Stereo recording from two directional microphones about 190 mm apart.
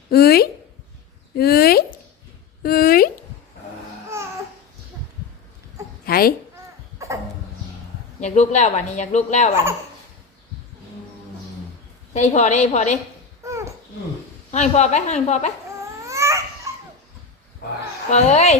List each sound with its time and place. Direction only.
0.1 s speech: 55° left (ahead or behind)
2.6 s a sound: 50° left (ahead or behind)
4.1 s babbling: 15° right (ahead or behind)
6.1 s babbling: 50° left (ahead or behind)
7.0 s a sound: 15° right (ahead or behind)
8.2 s speech: 35° left (ahead or behind)
12.1 s speech: 35° left (ahead or behind)
13.4 s babbling: 15° right (ahead or behind)
14.5 s speech: 35° left (ahead or behind)
16.0 s a sound: 15° right (ahead or behind)
18.1 s speech: 35° left (ahead or behind)